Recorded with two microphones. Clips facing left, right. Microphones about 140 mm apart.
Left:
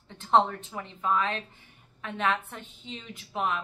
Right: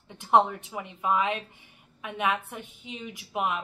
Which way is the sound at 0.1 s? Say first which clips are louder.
Right 1 dB; 15° right (ahead or behind).